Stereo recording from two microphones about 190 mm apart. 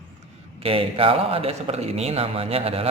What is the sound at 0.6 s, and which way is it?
Music, 30° right (ahead or behind).